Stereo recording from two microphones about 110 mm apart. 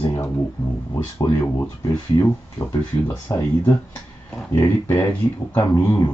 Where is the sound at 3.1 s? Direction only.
25° left (ahead or behind).